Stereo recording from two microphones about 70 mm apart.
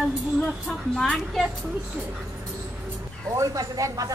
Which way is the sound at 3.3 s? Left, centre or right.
Right.